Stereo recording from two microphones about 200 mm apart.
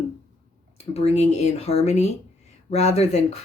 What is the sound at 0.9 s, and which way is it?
Speech, 30° left (ahead or behind).